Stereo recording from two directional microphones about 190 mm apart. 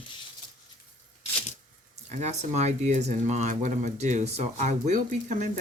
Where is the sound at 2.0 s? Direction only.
40° right (ahead or behind).